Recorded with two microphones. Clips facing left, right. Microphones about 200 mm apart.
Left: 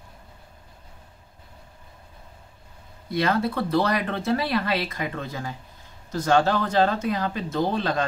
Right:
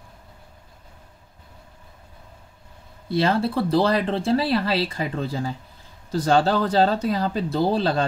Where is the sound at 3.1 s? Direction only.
30° right (ahead or behind).